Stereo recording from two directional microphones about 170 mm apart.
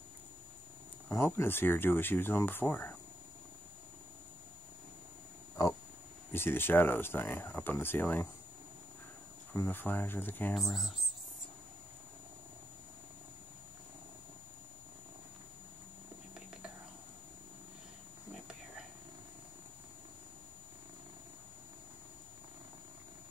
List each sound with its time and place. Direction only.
1.0 s speech: 15° left (ahead or behind)
5.6 s oink: 20° left (ahead or behind)
6.3 s speech: 15° left (ahead or behind)
9.5 s speech: 10° left (ahead or behind)
10.6 s speech: centre (ahead or behind)